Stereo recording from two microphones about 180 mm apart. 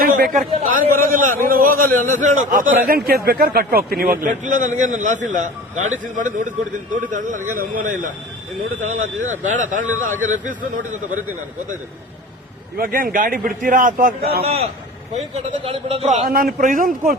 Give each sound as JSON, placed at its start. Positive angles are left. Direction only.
{"t": 0.6, "sound": "a man's voice", "side_deg": -50}
{"t": 9.0, "sound": "speech", "side_deg": -90}
{"t": 9.4, "sound": "a man's voice", "side_deg": -45}
{"t": 12.7, "sound": "a man's voice", "side_deg": -55}
{"t": 14.4, "sound": "a man's voice", "side_deg": -35}
{"t": 16.2, "sound": "a man's voice", "side_deg": -55}